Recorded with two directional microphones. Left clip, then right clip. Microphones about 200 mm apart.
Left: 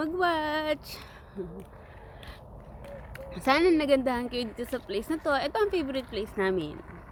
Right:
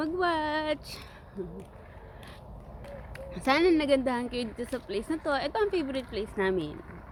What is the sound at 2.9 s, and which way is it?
Speech, 5° left (ahead or behind).